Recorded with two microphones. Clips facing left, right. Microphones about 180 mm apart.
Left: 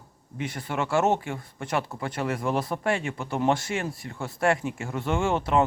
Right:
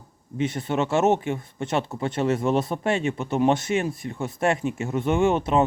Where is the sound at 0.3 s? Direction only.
25° right (ahead or behind).